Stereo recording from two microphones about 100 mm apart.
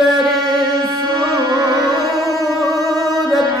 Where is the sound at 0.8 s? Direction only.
45° right (ahead or behind).